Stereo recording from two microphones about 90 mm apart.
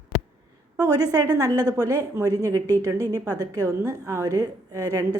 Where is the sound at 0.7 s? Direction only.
45° right (ahead or behind).